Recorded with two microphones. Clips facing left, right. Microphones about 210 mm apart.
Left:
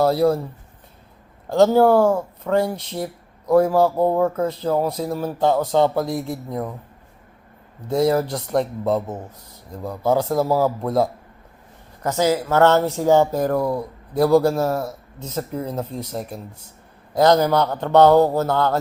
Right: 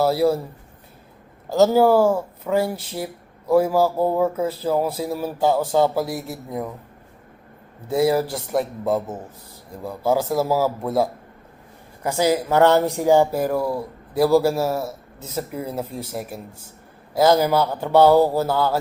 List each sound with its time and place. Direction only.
0.0 s speech: 5° right (ahead or behind)
1.5 s speech: 5° right (ahead or behind)
7.9 s speech: 5° right (ahead or behind)